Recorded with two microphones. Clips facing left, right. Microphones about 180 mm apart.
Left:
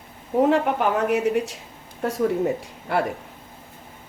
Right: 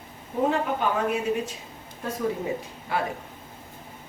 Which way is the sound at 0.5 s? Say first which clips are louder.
Left 5 dB; 80° left.